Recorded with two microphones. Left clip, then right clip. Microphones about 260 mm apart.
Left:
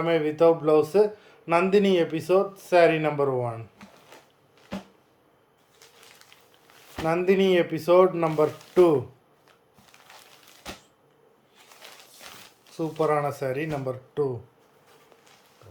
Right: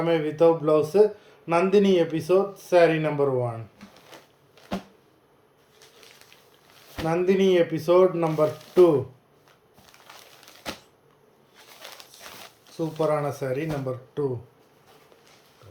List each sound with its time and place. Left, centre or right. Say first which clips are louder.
0.0 s speech: even; centre
6.9 s speech: even; centre
12.7 s speech: even; centre